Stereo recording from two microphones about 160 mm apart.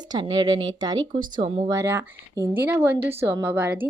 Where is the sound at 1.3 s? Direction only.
40° right (ahead or behind).